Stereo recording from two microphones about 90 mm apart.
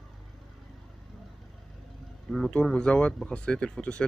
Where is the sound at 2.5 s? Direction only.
10° left (ahead or behind).